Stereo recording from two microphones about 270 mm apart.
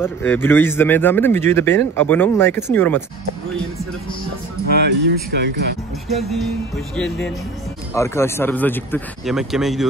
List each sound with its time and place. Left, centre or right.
0.0 s a man's voice: centre
4.6 s speech: right
6.0 s music: centre
7.9 s a man's voice: centre